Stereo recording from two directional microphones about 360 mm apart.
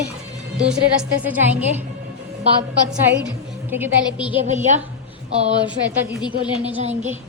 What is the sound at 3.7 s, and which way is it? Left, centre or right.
Speech, centre.